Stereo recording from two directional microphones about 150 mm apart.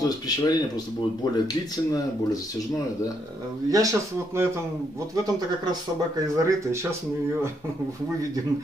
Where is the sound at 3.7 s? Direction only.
20° right (ahead or behind).